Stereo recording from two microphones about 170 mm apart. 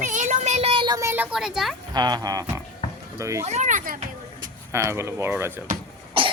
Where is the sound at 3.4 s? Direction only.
45° right (ahead or behind).